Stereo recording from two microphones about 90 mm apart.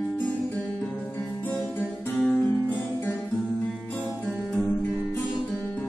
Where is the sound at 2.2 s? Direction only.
10° left (ahead or behind).